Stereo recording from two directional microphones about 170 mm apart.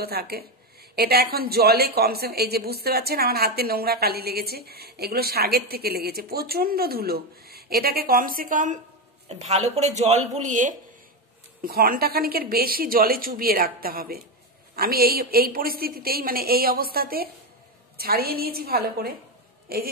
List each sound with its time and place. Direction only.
0.0 s a woman's voice: 65° right (ahead or behind); by 10.8 s 45° right (ahead or behind)
11.6 s speech: 60° right (ahead or behind)